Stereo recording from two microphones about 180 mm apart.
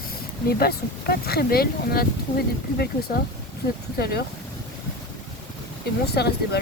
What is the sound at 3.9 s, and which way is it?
Speech, 60° left (ahead or behind).